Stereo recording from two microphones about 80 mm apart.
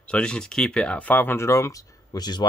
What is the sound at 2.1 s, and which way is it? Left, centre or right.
Speech, left.